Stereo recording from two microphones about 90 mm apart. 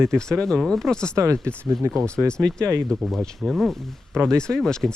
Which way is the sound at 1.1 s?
35° right (ahead or behind).